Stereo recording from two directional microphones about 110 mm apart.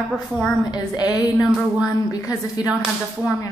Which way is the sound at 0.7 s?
35° left (ahead or behind).